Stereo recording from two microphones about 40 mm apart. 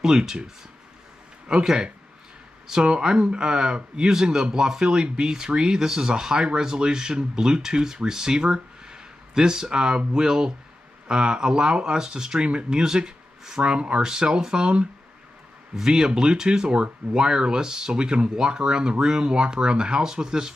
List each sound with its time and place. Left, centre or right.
0.0 s speech: centre
1.5 s speech: centre